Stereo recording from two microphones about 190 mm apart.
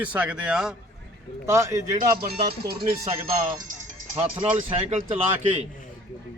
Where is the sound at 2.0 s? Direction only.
55° right (ahead or behind).